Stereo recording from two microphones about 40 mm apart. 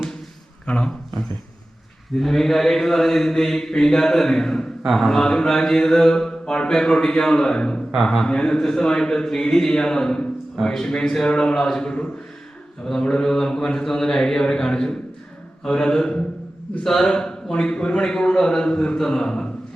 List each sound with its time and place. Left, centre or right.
2.1 s a man's voice: centre
13.0 s a man's voice: centre